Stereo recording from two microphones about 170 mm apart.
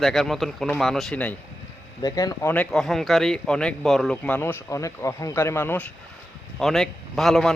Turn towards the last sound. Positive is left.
turn(degrees=5)  # may be behind; listen again after turning